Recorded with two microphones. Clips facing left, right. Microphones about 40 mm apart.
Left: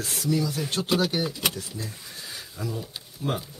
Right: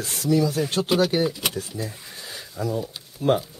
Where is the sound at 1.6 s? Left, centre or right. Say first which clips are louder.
Right 4 dB; centre.